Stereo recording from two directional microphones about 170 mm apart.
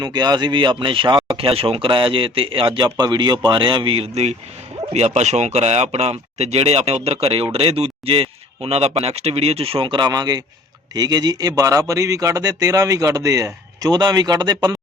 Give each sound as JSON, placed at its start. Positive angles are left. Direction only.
{"t": 0.0, "sound": "a man's voice", "side_deg": -25}